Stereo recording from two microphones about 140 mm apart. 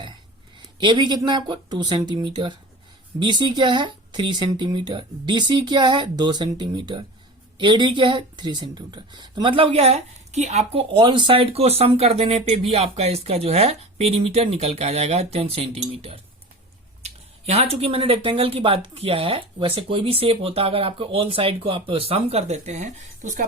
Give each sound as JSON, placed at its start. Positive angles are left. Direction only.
{"t": 0.8, "sound": "speech", "side_deg": -35}
{"t": 10.9, "sound": "speech", "side_deg": -35}